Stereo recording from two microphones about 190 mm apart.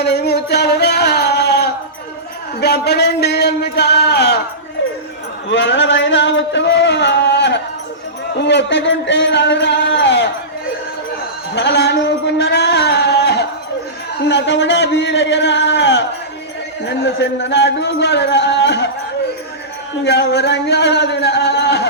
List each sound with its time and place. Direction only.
0.0 s music: 60° left (ahead or behind)
2.6 s speech: 60° left (ahead or behind)
4.8 s a sound: 70° left (ahead or behind)
5.5 s music: 70° left (ahead or behind)
8.4 s speech: 65° left (ahead or behind)
11.5 s a sound: 65° left (ahead or behind)
14.2 s speech: 65° left (ahead or behind)
20.1 s speech: 60° left (ahead or behind)